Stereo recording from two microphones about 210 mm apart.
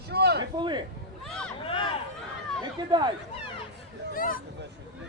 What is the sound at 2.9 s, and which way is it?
Speech, 20° right (ahead or behind).